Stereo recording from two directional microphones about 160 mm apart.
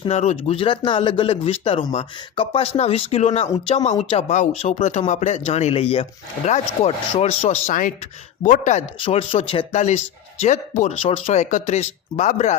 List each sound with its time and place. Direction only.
0.1 s speech: 40° left (ahead or behind)
9.0 s speech: 35° left (ahead or behind)